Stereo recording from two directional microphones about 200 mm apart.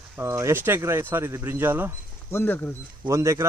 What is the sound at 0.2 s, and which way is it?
Speech, 15° right (ahead or behind).